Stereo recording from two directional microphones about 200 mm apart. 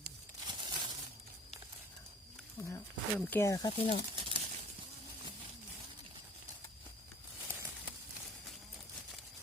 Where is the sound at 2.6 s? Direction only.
10° left (ahead or behind).